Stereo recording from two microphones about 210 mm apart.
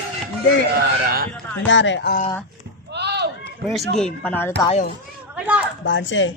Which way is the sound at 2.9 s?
55° right (ahead or behind).